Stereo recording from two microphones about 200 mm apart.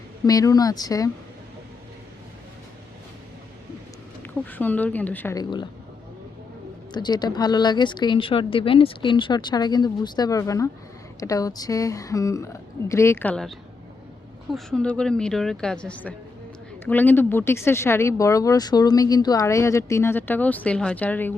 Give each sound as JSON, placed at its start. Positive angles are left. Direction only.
{"t": 0.3, "sound": "speech", "side_deg": 20}
{"t": 4.2, "sound": "speech", "side_deg": 10}
{"t": 6.9, "sound": "a woman's voice", "side_deg": 20}